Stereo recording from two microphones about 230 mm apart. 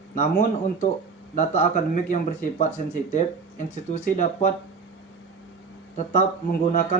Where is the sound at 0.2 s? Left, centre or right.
Left.